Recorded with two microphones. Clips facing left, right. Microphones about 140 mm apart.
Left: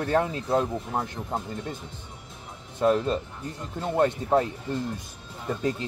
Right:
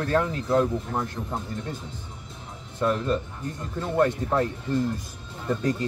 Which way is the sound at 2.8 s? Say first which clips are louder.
Left 2 dB; 25° left (ahead or behind).